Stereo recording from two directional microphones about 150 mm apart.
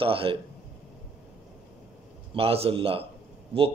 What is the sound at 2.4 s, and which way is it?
Speech, 40° right (ahead or behind).